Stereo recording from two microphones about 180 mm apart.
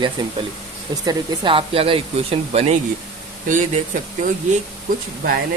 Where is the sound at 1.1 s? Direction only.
25° right (ahead or behind).